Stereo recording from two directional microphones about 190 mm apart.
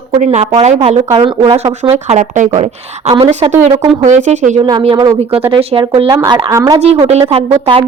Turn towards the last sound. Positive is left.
turn(degrees=-30)  # may be behind; listen again after turning